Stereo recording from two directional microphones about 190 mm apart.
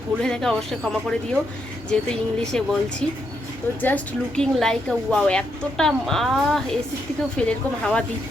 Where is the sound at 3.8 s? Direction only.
5° left (ahead or behind).